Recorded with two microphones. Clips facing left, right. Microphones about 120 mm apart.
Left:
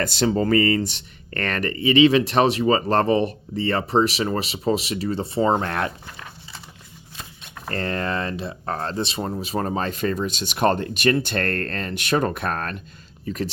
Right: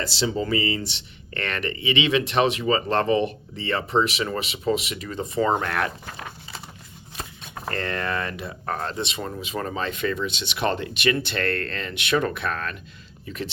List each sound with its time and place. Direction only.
0.0 s speech: 50° left (ahead or behind); by 5.9 s 30° left (ahead or behind)
7.7 s speech: 35° left (ahead or behind)